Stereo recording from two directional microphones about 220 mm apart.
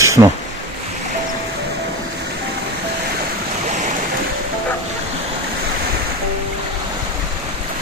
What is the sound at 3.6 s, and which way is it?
Stream, 35° right (ahead or behind).